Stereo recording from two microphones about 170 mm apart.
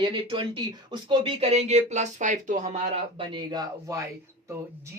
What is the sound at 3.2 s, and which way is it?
Speech, 25° right (ahead or behind).